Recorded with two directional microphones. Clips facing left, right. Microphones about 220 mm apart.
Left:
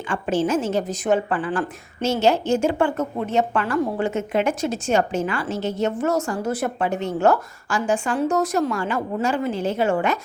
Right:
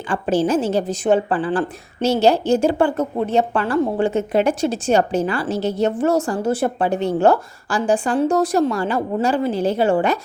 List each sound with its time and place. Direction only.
0.1 s a woman's voice: 35° right (ahead or behind)